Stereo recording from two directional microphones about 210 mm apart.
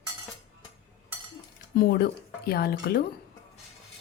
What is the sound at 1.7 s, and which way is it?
Speech, 50° left (ahead or behind).